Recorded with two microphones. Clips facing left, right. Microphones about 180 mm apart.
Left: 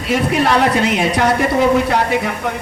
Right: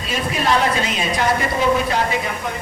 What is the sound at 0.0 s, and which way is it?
A man's voice, 65° left (ahead or behind).